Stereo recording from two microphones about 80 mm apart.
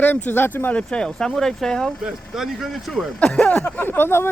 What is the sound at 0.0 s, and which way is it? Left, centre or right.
Speech, left.